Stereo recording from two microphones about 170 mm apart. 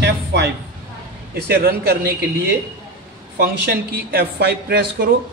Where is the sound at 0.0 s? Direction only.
80° right.